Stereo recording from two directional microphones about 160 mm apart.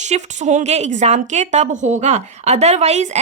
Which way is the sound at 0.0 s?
45° right (ahead or behind).